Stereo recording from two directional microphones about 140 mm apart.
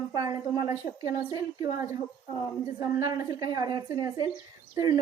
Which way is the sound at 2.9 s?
30° right (ahead or behind).